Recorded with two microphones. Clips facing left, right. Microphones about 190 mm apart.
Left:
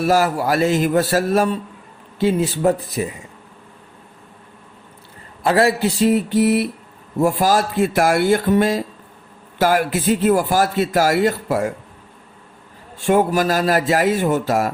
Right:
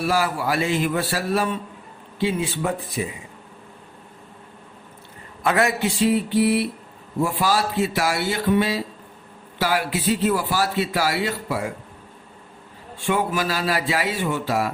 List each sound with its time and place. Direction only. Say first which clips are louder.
0.0 s a man's voice: left 5 dB; 45° left (ahead or behind)
5.4 s a man's voice: left 5 dB; 30° left (ahead or behind)
13.1 s a man's voice: left 7 dB; 45° left (ahead or behind)